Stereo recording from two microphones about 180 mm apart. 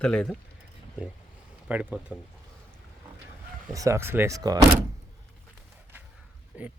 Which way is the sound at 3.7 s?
15° right (ahead or behind).